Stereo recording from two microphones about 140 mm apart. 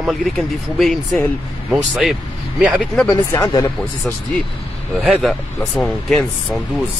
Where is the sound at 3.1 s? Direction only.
20° left (ahead or behind).